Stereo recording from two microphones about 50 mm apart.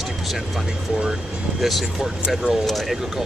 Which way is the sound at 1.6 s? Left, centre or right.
Centre.